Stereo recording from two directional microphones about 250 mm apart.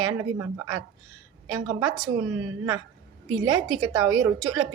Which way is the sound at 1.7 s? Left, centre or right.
Centre.